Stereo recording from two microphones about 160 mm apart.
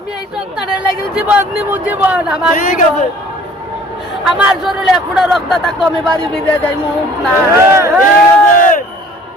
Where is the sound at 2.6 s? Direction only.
55° left (ahead or behind).